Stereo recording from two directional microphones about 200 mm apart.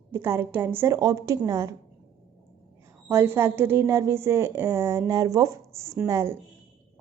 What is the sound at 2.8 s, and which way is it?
A woman's voice, 15° right (ahead or behind).